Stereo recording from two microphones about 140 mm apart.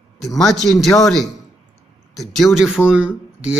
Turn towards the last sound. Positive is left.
turn(degrees=-5)  # may be behind; listen again after turning